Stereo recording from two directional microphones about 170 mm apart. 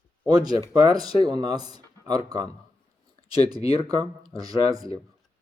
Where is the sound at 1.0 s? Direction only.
25° right (ahead or behind).